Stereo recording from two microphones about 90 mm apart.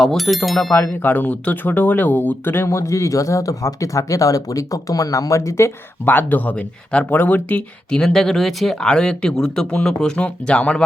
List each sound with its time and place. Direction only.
0.0 s speech: centre (ahead or behind)
0.7 s speech: 20° left (ahead or behind)
6.1 s speech: 20° left (ahead or behind)